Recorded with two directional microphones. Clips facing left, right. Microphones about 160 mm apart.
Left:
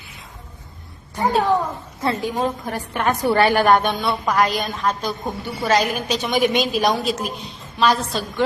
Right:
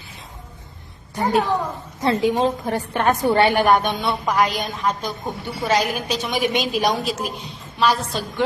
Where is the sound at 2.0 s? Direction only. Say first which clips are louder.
Right 3 dB; 20° right (ahead or behind).